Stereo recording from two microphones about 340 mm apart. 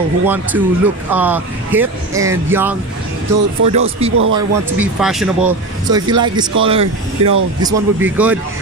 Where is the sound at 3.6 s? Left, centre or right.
Right.